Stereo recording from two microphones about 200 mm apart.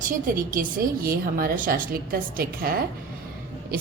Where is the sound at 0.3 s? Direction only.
45° right (ahead or behind).